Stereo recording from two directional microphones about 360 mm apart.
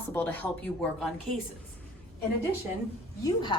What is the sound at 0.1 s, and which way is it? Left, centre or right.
Speech, centre.